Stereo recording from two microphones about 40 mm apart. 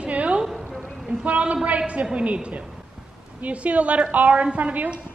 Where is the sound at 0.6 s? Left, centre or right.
Left.